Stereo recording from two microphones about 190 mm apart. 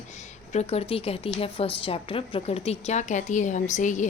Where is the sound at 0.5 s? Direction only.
35° left (ahead or behind).